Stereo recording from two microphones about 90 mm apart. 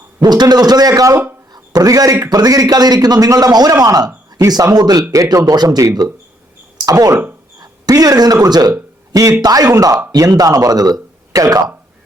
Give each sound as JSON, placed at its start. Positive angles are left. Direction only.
{"t": 0.2, "sound": "a man's voice", "side_deg": -50}